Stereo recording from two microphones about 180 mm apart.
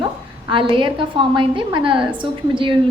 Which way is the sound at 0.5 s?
30° right (ahead or behind).